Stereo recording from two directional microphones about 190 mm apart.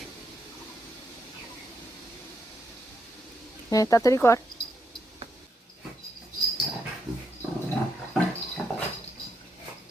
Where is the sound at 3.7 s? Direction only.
15° left (ahead or behind).